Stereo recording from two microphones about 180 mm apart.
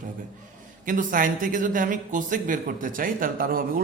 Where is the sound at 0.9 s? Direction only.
50° right (ahead or behind).